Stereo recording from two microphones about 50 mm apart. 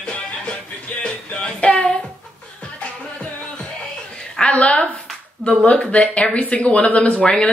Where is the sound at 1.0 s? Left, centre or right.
Left.